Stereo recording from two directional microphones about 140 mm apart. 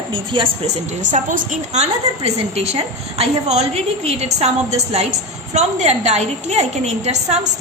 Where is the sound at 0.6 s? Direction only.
55° right (ahead or behind).